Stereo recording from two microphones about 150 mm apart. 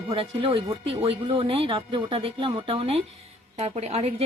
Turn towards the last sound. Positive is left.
turn(degrees=-45)  # may be behind; listen again after turning